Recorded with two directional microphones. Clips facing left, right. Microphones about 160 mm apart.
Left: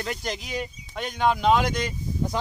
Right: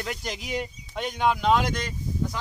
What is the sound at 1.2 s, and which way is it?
Speech, centre (ahead or behind).